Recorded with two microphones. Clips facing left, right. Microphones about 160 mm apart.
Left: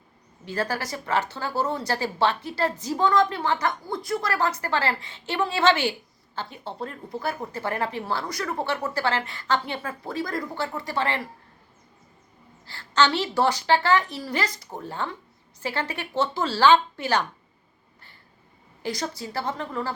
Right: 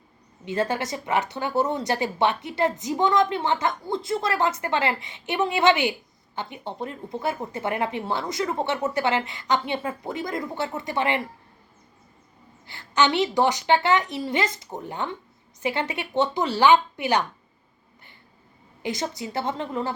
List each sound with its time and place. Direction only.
0.4 s speech: 20° right (ahead or behind)
12.6 s speech: 20° right (ahead or behind)
18.8 s speech: 20° right (ahead or behind)